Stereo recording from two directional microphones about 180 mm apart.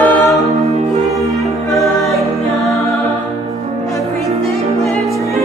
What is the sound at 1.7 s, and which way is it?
Music, centre (ahead or behind).